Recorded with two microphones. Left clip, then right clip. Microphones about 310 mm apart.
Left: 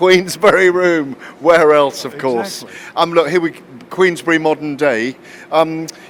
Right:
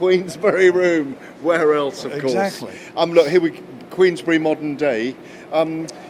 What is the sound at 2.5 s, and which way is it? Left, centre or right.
A man's voice, left.